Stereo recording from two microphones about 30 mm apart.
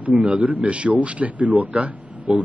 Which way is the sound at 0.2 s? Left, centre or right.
Right.